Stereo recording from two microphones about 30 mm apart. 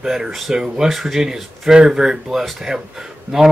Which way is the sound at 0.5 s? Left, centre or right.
Right.